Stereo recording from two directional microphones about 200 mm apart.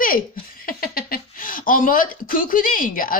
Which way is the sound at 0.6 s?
45° left (ahead or behind).